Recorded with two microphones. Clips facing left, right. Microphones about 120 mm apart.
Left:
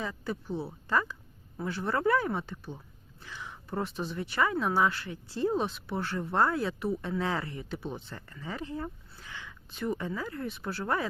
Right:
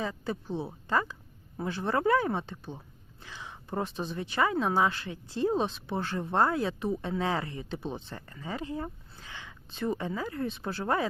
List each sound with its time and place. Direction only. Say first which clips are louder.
0.0 s speech: right 2 dB; 20° right (ahead or behind)